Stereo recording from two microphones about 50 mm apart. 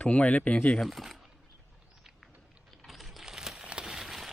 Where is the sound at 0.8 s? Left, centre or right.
Centre.